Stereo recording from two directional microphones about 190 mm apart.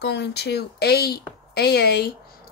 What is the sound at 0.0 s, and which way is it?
Speech, 60° left (ahead or behind).